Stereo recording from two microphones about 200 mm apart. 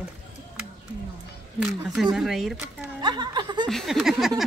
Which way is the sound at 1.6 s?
Centre (ahead or behind).